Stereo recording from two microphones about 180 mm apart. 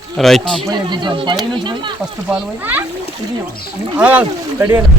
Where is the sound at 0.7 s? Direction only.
25° right (ahead or behind).